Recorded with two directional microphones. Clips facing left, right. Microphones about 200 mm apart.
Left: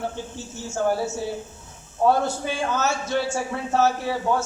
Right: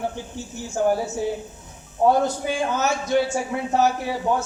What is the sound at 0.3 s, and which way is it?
A man's voice, 15° right (ahead or behind).